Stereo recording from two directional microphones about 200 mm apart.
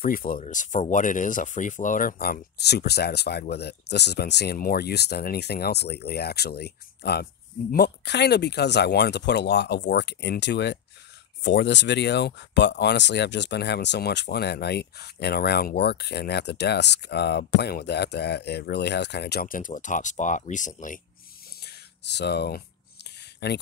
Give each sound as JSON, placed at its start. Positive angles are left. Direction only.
{"t": 0.0, "sound": "speech", "side_deg": 45}
{"t": 21.5, "sound": "a sound", "side_deg": 55}
{"t": 23.4, "sound": "speech", "side_deg": 55}